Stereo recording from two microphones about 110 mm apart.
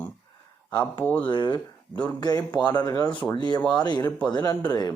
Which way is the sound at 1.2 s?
45° left (ahead or behind).